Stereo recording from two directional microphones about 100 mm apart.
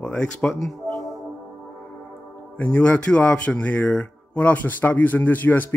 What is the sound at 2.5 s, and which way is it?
Speech, 15° left (ahead or behind).